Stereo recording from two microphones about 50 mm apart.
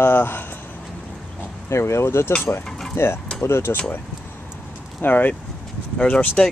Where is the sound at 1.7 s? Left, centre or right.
Left.